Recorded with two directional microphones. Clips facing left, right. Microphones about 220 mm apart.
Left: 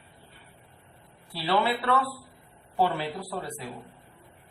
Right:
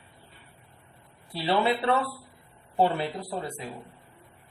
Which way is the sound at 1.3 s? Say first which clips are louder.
Right 1 dB; 25° right (ahead or behind).